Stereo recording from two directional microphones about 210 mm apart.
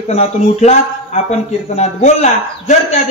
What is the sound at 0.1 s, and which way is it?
Speech, 30° left (ahead or behind).